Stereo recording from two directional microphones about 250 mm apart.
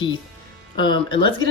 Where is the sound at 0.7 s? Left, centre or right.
Centre.